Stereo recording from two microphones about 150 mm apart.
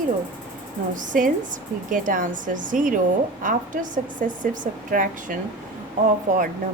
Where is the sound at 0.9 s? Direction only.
65° right (ahead or behind).